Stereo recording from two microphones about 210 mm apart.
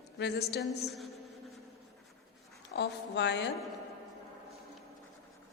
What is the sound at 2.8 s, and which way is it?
Speech, 55° left (ahead or behind).